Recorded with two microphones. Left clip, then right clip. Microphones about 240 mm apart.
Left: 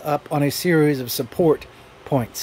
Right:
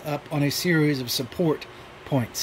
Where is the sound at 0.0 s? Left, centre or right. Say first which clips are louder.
Left 6 dB; centre.